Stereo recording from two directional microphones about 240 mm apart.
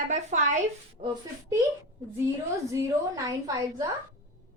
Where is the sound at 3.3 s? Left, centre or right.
Centre.